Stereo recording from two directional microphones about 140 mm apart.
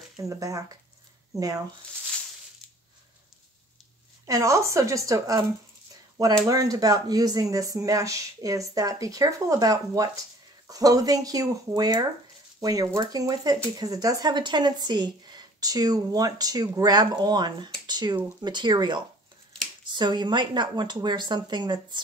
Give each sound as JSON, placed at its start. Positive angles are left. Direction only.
{"t": 0.2, "sound": "speech", "side_deg": -25}
{"t": 4.3, "sound": "speech", "side_deg": -20}
{"t": 6.4, "sound": "speech", "side_deg": -25}